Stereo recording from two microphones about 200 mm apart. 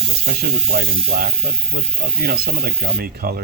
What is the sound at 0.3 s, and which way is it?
Speech, 50° right (ahead or behind).